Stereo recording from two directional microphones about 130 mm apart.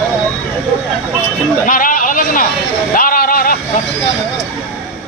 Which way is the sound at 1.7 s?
90° left.